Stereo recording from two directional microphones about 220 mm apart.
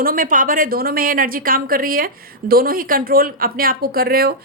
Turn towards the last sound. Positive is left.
turn(degrees=-45)  # may be behind; listen again after turning